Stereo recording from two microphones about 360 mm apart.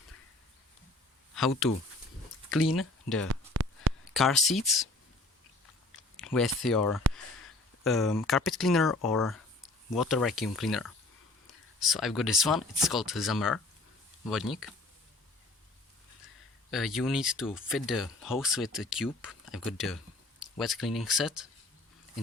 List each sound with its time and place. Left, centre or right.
1.4 s speech: centre
3.5 s a sound: right
4.1 s speech: centre
6.1 s speech: centre
16.7 s speech: centre